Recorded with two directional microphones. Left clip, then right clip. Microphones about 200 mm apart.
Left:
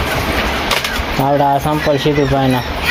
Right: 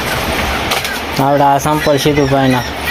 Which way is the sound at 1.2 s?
10° right (ahead or behind).